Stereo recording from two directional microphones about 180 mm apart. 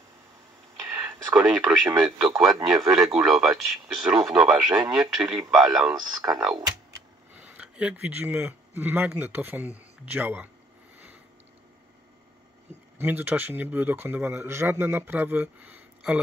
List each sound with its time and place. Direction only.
1.3 s speech: 15° right (ahead or behind)
2.0 s speech: centre (ahead or behind)
12.9 s speech: 10° right (ahead or behind)